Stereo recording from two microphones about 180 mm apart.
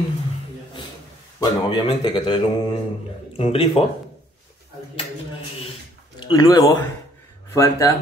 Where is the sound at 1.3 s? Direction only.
25° left (ahead or behind).